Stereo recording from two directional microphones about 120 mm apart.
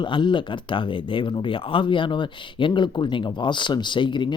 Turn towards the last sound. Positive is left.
turn(degrees=40)  # may be behind; listen again after turning